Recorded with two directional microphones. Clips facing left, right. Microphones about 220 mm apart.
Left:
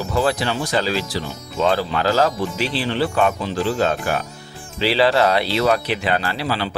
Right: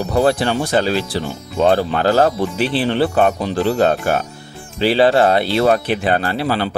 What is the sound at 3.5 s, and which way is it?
Speech, 60° right (ahead or behind).